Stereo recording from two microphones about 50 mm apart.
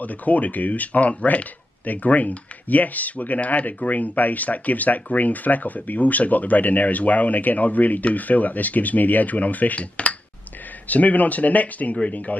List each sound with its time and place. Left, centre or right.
0.0 s speech: left